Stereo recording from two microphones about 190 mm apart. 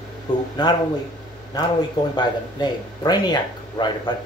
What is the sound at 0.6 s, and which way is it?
Speech, 20° left (ahead or behind).